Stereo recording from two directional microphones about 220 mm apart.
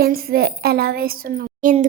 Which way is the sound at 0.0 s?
45° right (ahead or behind).